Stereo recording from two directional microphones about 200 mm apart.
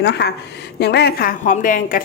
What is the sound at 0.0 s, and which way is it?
Speech, 55° left (ahead or behind).